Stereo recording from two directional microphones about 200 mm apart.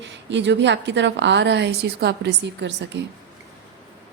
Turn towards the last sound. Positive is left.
turn(degrees=-60)  # may be behind; listen again after turning